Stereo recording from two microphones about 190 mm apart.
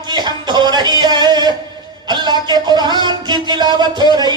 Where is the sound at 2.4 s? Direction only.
20° right (ahead or behind).